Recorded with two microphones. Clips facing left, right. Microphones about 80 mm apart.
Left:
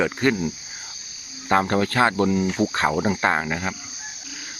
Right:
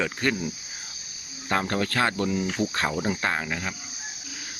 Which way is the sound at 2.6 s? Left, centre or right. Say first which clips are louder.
Left 6 dB; left.